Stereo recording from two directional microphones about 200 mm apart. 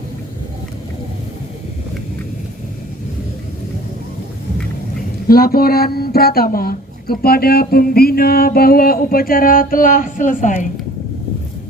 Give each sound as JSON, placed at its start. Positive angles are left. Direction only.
{"t": 5.3, "sound": "speech", "side_deg": 50}